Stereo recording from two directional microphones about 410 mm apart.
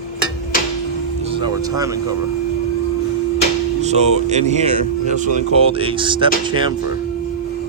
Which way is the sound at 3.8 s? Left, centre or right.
Centre.